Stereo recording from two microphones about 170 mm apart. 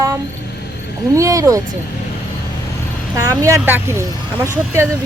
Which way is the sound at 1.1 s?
20° right (ahead or behind).